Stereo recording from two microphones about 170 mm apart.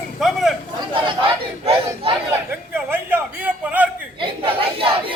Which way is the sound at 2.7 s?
10° right (ahead or behind).